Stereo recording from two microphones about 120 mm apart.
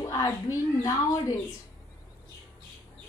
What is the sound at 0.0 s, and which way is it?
A woman's voice, 25° left (ahead or behind).